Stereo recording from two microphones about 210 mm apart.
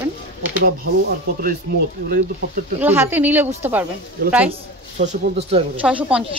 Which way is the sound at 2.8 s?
10° right (ahead or behind).